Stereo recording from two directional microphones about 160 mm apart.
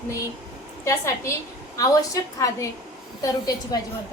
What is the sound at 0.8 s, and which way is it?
A woman's voice, 20° left (ahead or behind).